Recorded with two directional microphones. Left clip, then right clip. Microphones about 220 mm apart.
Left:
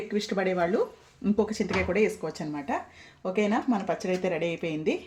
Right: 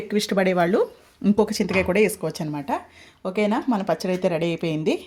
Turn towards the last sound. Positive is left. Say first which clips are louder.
# right 5 dB
turn(degrees=-45)  # may be behind; listen again after turning